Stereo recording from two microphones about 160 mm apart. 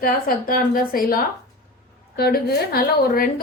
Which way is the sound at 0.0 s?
60° left (ahead or behind).